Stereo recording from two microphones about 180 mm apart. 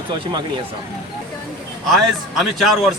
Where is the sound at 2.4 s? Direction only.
Centre (ahead or behind).